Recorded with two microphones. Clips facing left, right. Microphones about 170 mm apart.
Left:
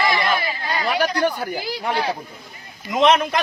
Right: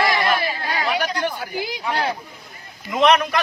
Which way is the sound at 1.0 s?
45° left (ahead or behind).